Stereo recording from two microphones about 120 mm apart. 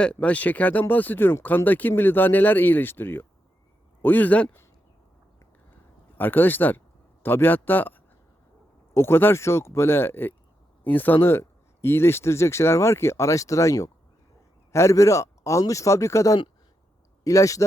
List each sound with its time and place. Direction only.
0.0 s speech: 10° left (ahead or behind)
6.1 s speech: 15° left (ahead or behind)